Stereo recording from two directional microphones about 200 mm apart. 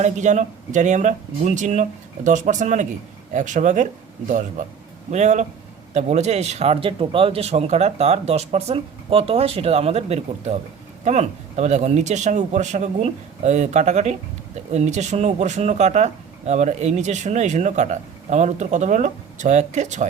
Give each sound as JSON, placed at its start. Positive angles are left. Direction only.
{"t": 0.0, "sound": "speech", "side_deg": -35}